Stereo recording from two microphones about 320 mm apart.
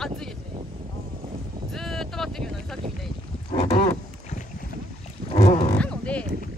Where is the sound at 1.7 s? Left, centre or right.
Centre.